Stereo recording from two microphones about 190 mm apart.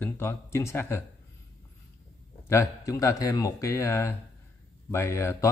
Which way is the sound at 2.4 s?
15° left (ahead or behind).